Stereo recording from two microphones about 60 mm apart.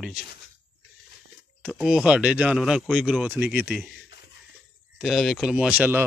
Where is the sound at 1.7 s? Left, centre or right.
Centre.